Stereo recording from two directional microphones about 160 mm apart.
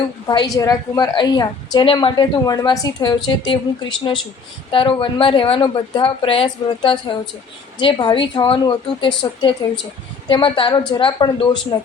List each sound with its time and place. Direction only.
0.3 s a woman's voice: 25° left (ahead or behind)